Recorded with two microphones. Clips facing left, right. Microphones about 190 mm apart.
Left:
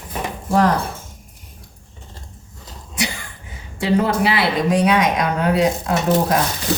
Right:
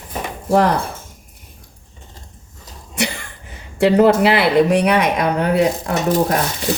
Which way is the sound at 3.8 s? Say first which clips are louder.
Right 6 dB; 65° right (ahead or behind).